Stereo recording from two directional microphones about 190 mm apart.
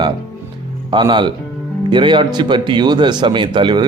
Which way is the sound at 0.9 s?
25° right (ahead or behind).